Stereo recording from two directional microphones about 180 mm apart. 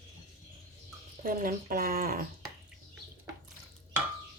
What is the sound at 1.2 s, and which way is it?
Speech, 50° right (ahead or behind).